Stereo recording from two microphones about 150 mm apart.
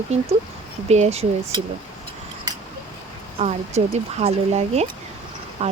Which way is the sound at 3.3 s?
45° right (ahead or behind).